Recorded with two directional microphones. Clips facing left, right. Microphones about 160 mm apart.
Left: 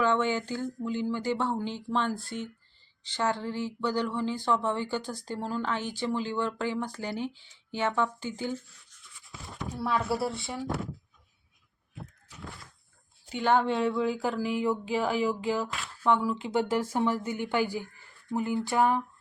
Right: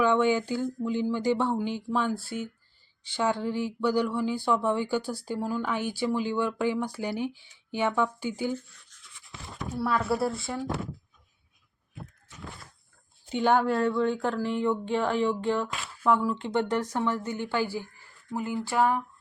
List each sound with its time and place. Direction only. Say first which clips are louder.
0.0 s speech: right 3 dB; 15° right (ahead or behind)
9.8 s speech: right 2 dB; centre (ahead or behind)
13.3 s speech: right 2 dB; 15° right (ahead or behind)
13.7 s speech: right 2 dB; centre (ahead or behind)
18.6 s a sound: right 2 dB; 15° left (ahead or behind)